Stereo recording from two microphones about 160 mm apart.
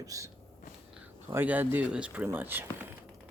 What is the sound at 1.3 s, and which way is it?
Speech, 10° right (ahead or behind).